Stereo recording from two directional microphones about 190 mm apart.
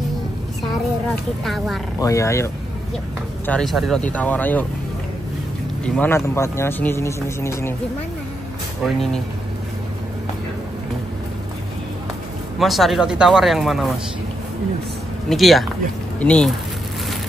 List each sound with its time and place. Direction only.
1.4 s speech: centre (ahead or behind)
2.0 s speech: 15° left (ahead or behind)
3.4 s speech: 5° left (ahead or behind)
5.9 s speech: 10° left (ahead or behind)
8.8 s speech: centre (ahead or behind)
12.5 s speech: centre (ahead or behind)
15.2 s speech: centre (ahead or behind)